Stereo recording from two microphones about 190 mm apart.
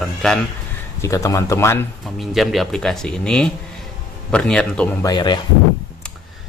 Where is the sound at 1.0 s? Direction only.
15° left (ahead or behind).